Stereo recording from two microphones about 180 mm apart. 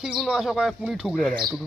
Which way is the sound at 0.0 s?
Centre (ahead or behind).